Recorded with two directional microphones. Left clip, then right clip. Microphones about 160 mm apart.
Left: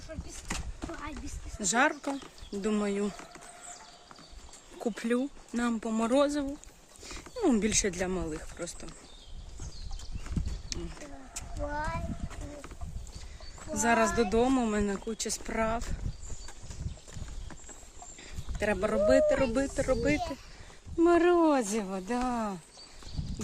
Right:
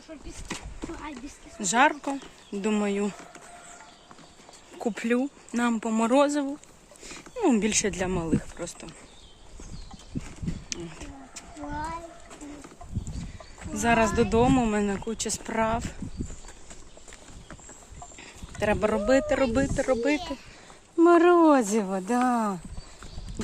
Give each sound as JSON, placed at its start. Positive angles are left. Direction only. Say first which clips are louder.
{"t": 1.5, "sound": "speech", "louder": "right 5 dB", "side_deg": 10}
{"t": 4.8, "sound": "speech", "louder": "right 4 dB", "side_deg": 5}
{"t": 7.3, "sound": "speech", "louder": "right 4 dB", "side_deg": 10}
{"t": 10.7, "sound": "a sound", "louder": "right 4 dB", "side_deg": 0}
{"t": 11.3, "sound": "a sound", "louder": "even", "side_deg": 55}
{"t": 13.7, "sound": "speech", "louder": "right 3 dB", "side_deg": 10}
{"t": 18.2, "sound": "speech", "louder": "right 4 dB", "side_deg": -5}
{"t": 21.0, "sound": "speech", "louder": "right 6 dB", "side_deg": -60}